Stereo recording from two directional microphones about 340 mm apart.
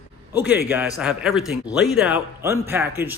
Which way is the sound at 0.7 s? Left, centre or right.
Centre.